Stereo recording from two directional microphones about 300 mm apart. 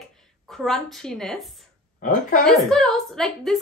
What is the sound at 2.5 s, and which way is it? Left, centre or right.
A woman's voice, centre.